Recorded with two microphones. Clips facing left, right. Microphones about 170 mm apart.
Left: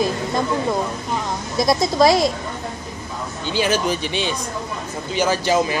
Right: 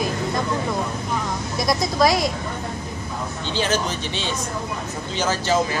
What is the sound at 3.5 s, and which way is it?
Speech, 10° left (ahead or behind).